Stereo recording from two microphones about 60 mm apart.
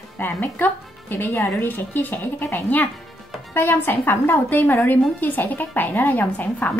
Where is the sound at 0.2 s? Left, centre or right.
Left.